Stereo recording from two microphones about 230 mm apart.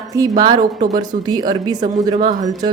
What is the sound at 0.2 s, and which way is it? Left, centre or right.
A woman's voice, centre.